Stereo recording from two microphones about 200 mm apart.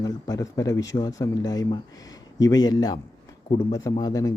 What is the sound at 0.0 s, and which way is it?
Speech, 20° left (ahead or behind).